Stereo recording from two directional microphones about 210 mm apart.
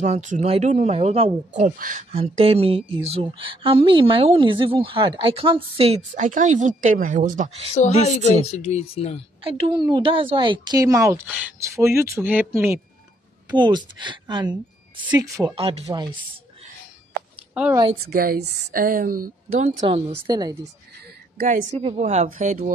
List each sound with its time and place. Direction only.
0.0 s a woman's voice: 35° right (ahead or behind)
7.7 s speech: 30° left (ahead or behind)
9.4 s a woman's voice: 25° right (ahead or behind)
13.6 s a woman's voice: 20° right (ahead or behind)
15.5 s a woman's voice: 25° right (ahead or behind)
17.6 s a woman's voice: 5° right (ahead or behind)
18.0 s a woman's voice: 45° right (ahead or behind)
20.2 s a woman's voice: 20° right (ahead or behind)
21.4 s speech: 40° right (ahead or behind)
21.7 s speech: 30° right (ahead or behind)